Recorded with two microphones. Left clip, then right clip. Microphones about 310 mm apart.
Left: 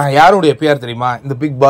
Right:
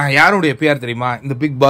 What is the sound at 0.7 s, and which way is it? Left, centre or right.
Speech, right.